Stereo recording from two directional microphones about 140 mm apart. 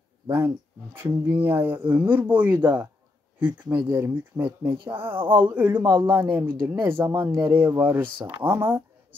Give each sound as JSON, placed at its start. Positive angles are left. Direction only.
{"t": 0.9, "sound": "speech", "side_deg": -15}
{"t": 3.3, "sound": "speech", "side_deg": -35}
{"t": 3.7, "sound": "speech", "side_deg": -15}
{"t": 8.0, "sound": "speech", "side_deg": -35}
{"t": 8.4, "sound": "speech", "side_deg": -15}